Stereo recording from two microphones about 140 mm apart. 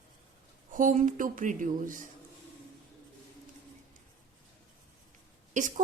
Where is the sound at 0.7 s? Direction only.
65° right (ahead or behind).